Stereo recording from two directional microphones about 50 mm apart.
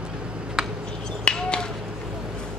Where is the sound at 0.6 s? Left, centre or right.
Centre.